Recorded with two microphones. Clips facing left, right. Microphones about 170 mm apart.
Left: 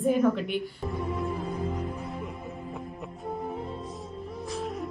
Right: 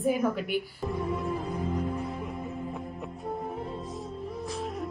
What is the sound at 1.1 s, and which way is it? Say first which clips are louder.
Music: even; centre (ahead or behind).